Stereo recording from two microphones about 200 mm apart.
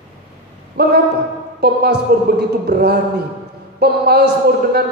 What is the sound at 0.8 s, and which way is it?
Speech, 55° right (ahead or behind).